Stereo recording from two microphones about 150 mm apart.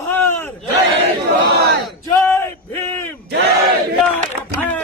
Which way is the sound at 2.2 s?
15° left (ahead or behind).